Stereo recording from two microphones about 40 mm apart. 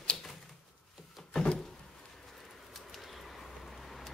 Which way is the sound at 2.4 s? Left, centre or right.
Centre.